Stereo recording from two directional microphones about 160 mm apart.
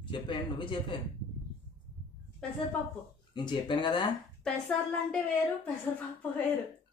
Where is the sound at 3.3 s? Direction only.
30° left (ahead or behind).